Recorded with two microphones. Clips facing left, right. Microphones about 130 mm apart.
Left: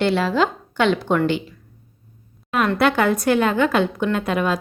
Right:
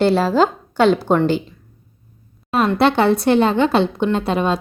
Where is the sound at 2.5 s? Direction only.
30° right (ahead or behind).